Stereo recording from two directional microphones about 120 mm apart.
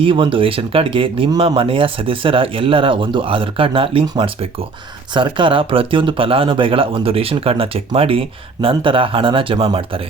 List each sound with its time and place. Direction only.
0.0 s speech: 45° right (ahead or behind)
4.0 s speech: 35° right (ahead or behind); by 10.0 s 50° right (ahead or behind)